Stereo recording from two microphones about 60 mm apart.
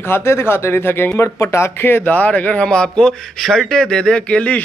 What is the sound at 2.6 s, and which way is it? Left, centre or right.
Speech, centre.